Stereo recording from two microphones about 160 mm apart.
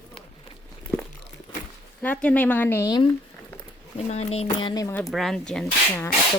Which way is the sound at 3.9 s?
40° left (ahead or behind).